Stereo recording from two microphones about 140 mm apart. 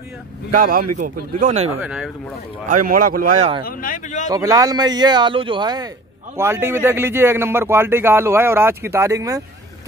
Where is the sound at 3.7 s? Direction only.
80° left.